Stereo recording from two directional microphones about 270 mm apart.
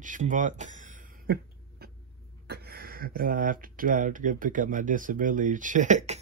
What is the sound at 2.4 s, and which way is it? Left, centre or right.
Speech, right.